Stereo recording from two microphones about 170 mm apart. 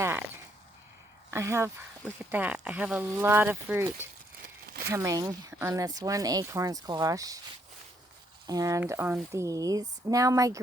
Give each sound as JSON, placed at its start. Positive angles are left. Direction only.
{"t": 0.0, "sound": "a sound", "side_deg": -15}
{"t": 1.3, "sound": "speech", "side_deg": -15}
{"t": 8.4, "sound": "speech", "side_deg": -20}